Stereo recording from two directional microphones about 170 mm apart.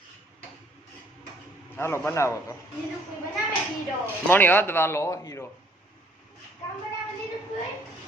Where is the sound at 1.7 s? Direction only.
15° left (ahead or behind).